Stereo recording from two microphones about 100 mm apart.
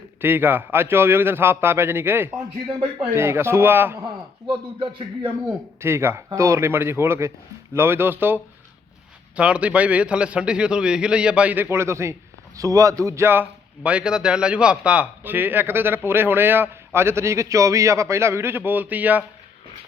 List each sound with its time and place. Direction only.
0.2 s a man's voice: 20° right (ahead or behind)
4.0 s a man's voice: 55° right (ahead or behind)
5.5 s a man's voice: 25° right (ahead or behind)